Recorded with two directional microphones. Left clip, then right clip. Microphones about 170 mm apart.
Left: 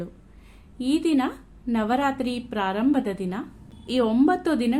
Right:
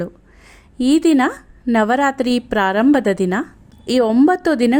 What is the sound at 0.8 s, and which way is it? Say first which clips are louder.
A woman's voice: right 9 dB; 60° right (ahead or behind).